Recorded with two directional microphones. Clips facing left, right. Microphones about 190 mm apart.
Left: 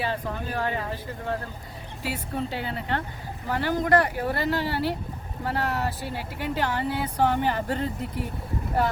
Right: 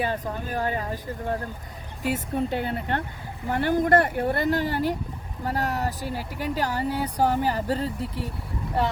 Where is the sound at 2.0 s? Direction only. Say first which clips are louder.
Right 4 dB; 50° right (ahead or behind).